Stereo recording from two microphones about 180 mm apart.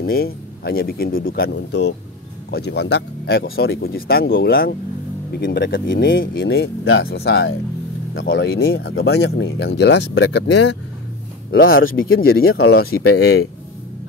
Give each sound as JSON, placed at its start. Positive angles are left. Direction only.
{"t": 0.0, "sound": "speech", "side_deg": 60}
{"t": 5.4, "sound": "speech", "side_deg": 70}
{"t": 8.1, "sound": "speech", "side_deg": 90}
{"t": 11.6, "sound": "speech", "side_deg": 55}